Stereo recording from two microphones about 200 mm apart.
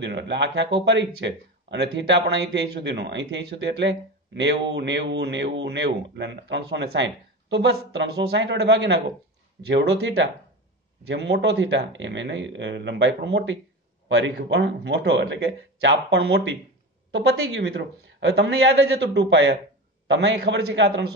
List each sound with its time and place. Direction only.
0.0 s speech: 60° right (ahead or behind)